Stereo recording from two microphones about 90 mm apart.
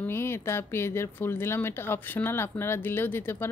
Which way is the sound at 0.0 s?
25° left (ahead or behind).